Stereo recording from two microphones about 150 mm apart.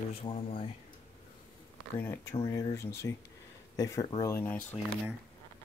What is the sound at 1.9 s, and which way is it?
Speech, 15° left (ahead or behind).